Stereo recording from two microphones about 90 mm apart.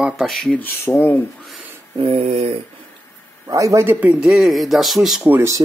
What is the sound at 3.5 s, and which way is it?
Speech, 35° right (ahead or behind).